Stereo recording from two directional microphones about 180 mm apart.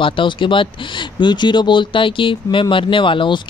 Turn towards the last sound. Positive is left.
turn(degrees=25)  # may be behind; listen again after turning